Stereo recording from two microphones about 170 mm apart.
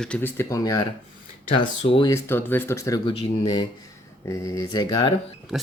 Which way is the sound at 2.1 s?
15° left (ahead or behind).